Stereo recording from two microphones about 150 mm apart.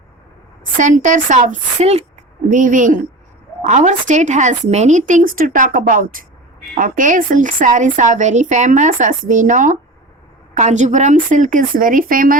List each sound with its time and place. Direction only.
0.8 s speech: 55° right (ahead or behind)
2.5 s speech: 60° right (ahead or behind)